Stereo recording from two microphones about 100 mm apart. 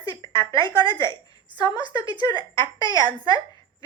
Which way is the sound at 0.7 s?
50° right (ahead or behind).